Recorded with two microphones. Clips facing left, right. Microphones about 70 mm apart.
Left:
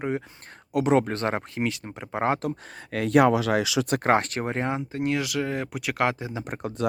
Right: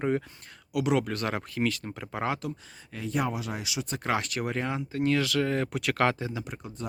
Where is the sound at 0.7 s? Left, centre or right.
Left.